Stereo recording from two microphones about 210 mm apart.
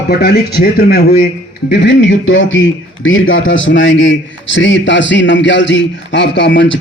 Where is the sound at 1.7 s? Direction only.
55° left (ahead or behind).